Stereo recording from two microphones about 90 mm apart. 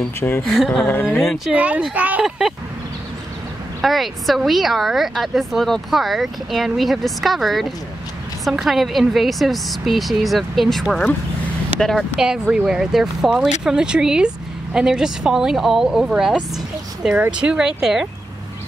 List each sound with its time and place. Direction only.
0.4 s speech: centre (ahead or behind)
0.8 s speech: 25° left (ahead or behind)
1.2 s speech: centre (ahead or behind)
1.5 s a woman's voice: 15° right (ahead or behind)
2.2 s speech: 5° right (ahead or behind)
3.8 s a woman's voice: centre (ahead or behind)